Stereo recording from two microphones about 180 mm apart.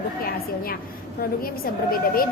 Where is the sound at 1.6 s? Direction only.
55° left (ahead or behind).